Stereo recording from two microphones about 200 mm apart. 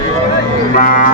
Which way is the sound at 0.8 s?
40° left (ahead or behind).